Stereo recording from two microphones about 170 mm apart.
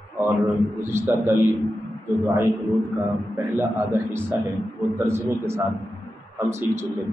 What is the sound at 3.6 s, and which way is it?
A man's voice, 15° right (ahead or behind).